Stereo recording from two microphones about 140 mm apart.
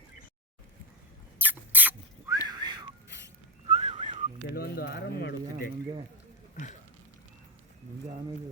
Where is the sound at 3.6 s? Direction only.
50° right (ahead or behind).